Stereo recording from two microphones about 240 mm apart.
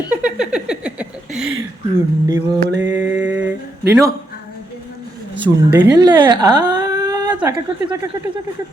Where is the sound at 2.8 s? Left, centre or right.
Centre.